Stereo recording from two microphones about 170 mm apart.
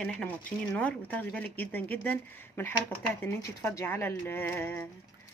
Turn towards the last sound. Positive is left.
turn(degrees=10)  # may be behind; listen again after turning